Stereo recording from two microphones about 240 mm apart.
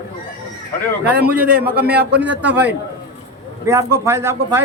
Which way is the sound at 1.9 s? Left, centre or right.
Right.